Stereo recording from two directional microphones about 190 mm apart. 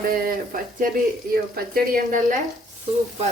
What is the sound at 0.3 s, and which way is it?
A woman's voice, 45° right (ahead or behind).